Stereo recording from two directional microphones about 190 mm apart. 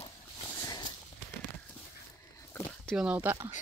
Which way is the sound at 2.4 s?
15° left (ahead or behind).